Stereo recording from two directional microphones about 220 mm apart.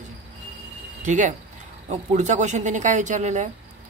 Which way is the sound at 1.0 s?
35° right (ahead or behind).